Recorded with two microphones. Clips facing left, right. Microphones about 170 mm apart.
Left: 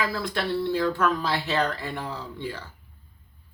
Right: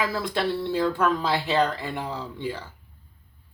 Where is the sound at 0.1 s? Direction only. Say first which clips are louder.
Right 2 dB; 20° right (ahead or behind).